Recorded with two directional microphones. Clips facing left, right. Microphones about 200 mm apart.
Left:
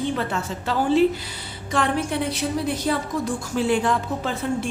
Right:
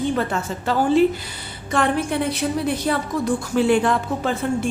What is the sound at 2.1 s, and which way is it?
A woman's voice, 55° right (ahead or behind).